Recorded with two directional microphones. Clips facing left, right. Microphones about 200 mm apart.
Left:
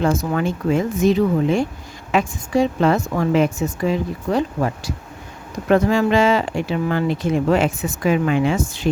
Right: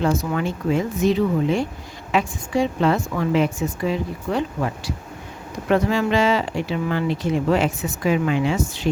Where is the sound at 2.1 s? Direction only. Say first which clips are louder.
Left 3 dB; 45° left (ahead or behind).